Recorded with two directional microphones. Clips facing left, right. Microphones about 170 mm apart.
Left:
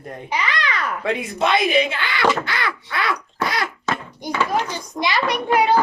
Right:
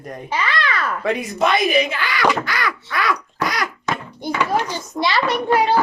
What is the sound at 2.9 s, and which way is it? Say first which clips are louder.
Babbling: right 3 dB; 25° left (ahead or behind).